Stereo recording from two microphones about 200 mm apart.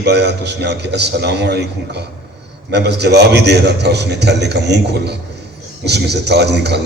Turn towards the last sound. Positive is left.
turn(degrees=-55)  # may be behind; listen again after turning